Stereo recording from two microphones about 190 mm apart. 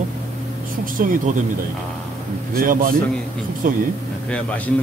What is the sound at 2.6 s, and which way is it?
Speech, 50° right (ahead or behind).